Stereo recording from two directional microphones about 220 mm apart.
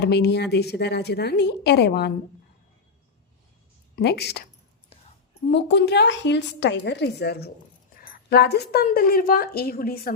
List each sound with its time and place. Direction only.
0.0 s a woman's voice: 50° left (ahead or behind)
3.9 s a woman's voice: 50° left (ahead or behind)
5.5 s a woman's voice: 55° left (ahead or behind)